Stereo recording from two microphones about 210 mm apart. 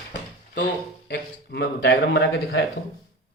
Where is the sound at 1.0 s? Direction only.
55° left (ahead or behind).